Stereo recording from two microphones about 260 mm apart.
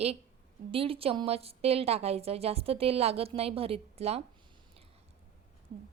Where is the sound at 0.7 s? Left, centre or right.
Right.